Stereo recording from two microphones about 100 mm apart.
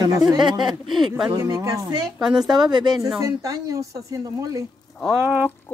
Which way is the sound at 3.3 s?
35° right (ahead or behind).